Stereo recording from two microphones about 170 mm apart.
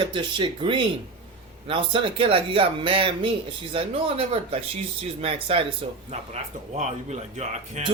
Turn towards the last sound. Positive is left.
turn(degrees=-40)  # may be behind; listen again after turning